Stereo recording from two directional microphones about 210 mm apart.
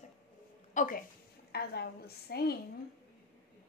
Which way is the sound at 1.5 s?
50° left (ahead or behind).